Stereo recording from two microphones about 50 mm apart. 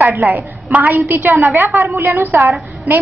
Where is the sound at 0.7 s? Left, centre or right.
Right.